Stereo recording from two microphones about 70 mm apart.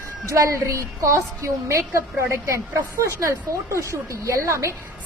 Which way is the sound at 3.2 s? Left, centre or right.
Right.